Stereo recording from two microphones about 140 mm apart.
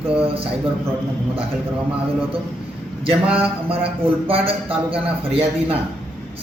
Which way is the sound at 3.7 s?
40° right (ahead or behind).